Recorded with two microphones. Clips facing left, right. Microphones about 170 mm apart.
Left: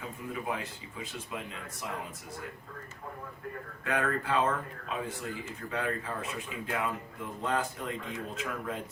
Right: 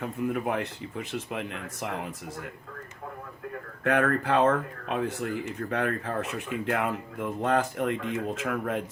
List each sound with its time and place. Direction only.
0.0 s speech: 60° right (ahead or behind)
3.8 s speech: 65° right (ahead or behind)